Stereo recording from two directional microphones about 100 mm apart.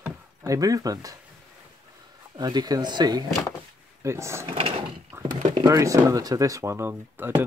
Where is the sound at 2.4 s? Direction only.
45° right (ahead or behind).